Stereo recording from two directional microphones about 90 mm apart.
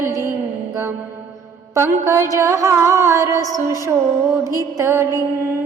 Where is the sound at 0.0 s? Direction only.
30° right (ahead or behind).